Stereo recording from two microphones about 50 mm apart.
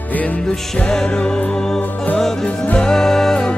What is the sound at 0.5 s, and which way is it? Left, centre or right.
Music, centre.